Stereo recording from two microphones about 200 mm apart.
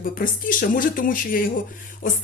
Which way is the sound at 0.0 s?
45° left (ahead or behind).